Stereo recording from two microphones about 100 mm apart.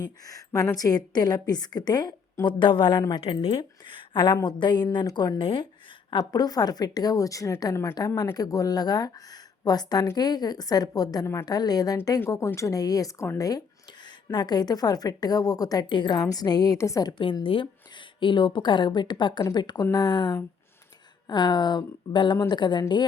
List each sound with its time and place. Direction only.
0.0 s a woman's voice: 35° left (ahead or behind)
5.4 s a woman's voice: 60° left (ahead or behind)
6.1 s speech: 45° left (ahead or behind)
12.5 s speech: 30° left (ahead or behind)
14.3 s speech: 45° left (ahead or behind)
17.4 s speech: 60° left (ahead or behind)